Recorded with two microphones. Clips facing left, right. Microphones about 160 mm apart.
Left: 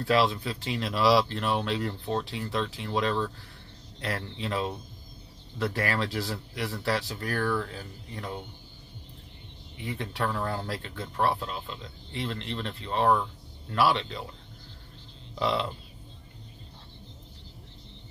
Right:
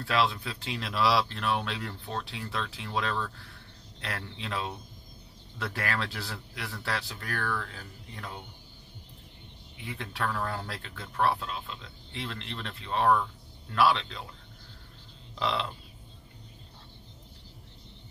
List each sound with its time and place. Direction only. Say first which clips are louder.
0.1 s speech: left 4 dB; centre (ahead or behind)
1.9 s speech: left 6 dB; 20° left (ahead or behind)
2.2 s speech: left 5 dB; centre (ahead or behind)
9.9 s speech: left 2 dB; 5° left (ahead or behind)
15.3 s speech: left 3 dB; 5° left (ahead or behind)